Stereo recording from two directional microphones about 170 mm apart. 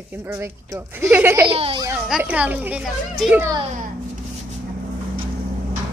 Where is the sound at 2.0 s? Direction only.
5° right (ahead or behind).